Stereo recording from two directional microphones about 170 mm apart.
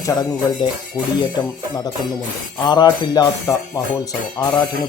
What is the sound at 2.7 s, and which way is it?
Speech, 25° left (ahead or behind).